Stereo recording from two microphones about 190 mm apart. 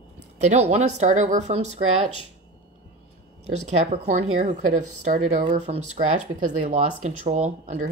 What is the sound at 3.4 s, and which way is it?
Speech, 35° right (ahead or behind).